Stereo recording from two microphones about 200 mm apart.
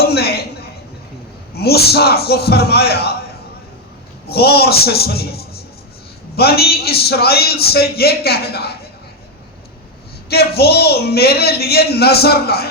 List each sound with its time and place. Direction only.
0.0 s a sound: 55° left (ahead or behind)
1.5 s a man's voice: 50° left (ahead or behind)
4.3 s a man's voice: 50° left (ahead or behind)
10.2 s a man's voice: 50° left (ahead or behind)